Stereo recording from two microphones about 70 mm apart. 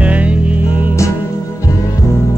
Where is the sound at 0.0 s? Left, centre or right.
Centre.